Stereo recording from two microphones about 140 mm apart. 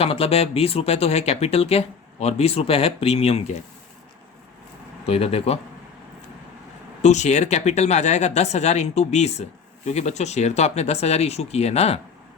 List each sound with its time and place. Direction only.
0.0 s speech: 45° left (ahead or behind)
5.0 s speech: 45° left (ahead or behind)
7.0 s speech: 55° left (ahead or behind)